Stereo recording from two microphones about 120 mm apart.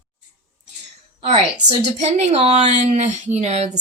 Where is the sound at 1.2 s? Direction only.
60° right (ahead or behind).